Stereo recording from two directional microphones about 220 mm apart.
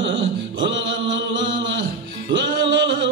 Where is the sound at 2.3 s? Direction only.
55° right (ahead or behind).